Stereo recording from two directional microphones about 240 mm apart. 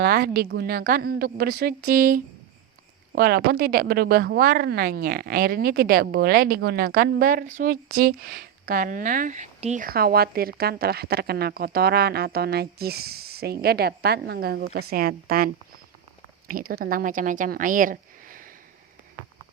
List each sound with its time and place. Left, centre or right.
0.0 s speech: right